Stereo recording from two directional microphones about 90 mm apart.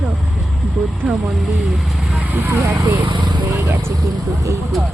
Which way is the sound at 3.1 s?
55° right (ahead or behind).